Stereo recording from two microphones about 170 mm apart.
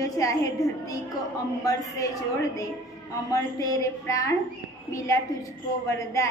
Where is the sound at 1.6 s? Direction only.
20° left (ahead or behind).